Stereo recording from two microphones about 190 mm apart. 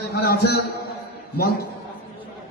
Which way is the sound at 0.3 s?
55° left (ahead or behind).